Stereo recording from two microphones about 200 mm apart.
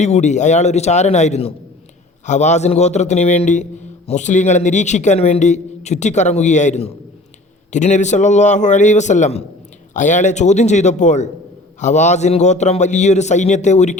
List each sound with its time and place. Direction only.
0.0 s a man's voice: 35° left (ahead or behind)